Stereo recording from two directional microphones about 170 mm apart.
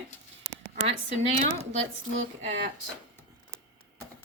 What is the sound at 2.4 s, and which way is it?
Speech, 90° right.